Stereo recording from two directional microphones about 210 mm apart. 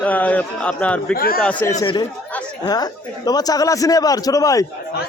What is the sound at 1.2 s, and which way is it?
Speech, 45° left (ahead or behind).